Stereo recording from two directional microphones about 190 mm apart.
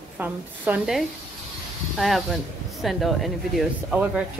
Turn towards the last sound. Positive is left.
turn(degrees=-5)  # may be behind; listen again after turning